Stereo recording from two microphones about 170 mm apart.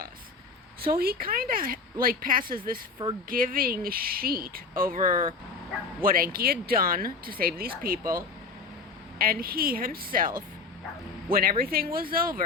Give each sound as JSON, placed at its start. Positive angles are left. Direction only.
{"t": 0.8, "sound": "speech", "side_deg": -60}